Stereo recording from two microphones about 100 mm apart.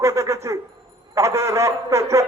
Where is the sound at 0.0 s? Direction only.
30° right (ahead or behind).